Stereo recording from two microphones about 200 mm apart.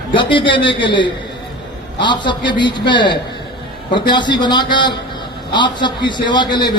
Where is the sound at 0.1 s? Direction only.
25° left (ahead or behind).